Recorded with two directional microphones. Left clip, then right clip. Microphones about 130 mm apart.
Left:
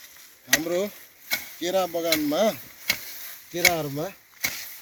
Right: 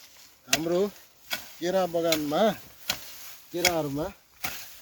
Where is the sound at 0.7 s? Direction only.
45° right (ahead or behind); by 2.5 s 90° right.